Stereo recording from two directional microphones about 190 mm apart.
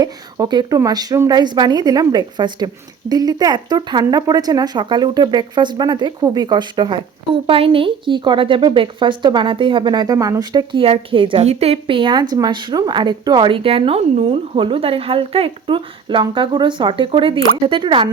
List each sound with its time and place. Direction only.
0.0 s a woman's voice: 20° right (ahead or behind)